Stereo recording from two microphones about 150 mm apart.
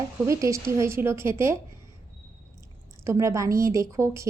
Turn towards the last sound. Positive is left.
turn(degrees=-20)  # may be behind; listen again after turning